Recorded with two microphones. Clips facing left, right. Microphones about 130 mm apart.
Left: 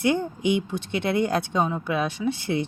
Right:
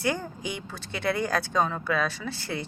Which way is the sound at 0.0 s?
20° left (ahead or behind).